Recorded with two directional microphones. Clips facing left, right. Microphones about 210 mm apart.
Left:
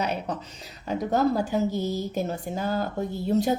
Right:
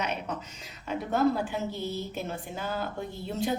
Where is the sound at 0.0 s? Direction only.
35° left (ahead or behind).